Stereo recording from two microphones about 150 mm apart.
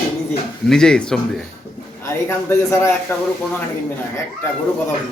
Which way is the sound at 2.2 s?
20° left (ahead or behind).